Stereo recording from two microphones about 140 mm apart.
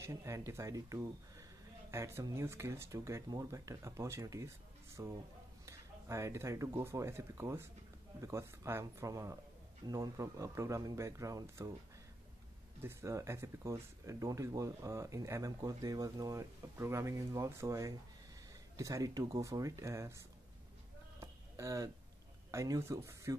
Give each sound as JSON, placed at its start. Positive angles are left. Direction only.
{"t": 0.0, "sound": "speech", "side_deg": -20}
{"t": 12.8, "sound": "speech", "side_deg": -20}
{"t": 21.2, "sound": "a sound", "side_deg": -20}
{"t": 22.5, "sound": "speech", "side_deg": -20}